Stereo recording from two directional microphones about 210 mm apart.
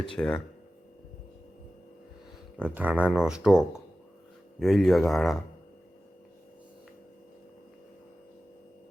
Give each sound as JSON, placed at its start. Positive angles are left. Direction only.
{"t": 0.2, "sound": "speech", "side_deg": 5}
{"t": 2.6, "sound": "speech", "side_deg": -5}